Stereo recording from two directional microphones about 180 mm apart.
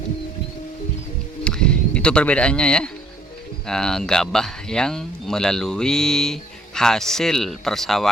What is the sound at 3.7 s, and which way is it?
Speech, 5° left (ahead or behind).